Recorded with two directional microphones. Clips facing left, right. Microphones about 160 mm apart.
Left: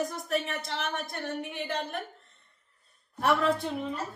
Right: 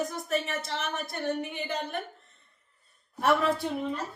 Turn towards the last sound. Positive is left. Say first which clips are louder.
# right 1 dB
turn(degrees=0)  # may be behind; listen again after turning